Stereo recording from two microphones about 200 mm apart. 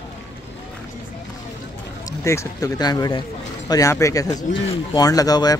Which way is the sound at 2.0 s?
15° left (ahead or behind).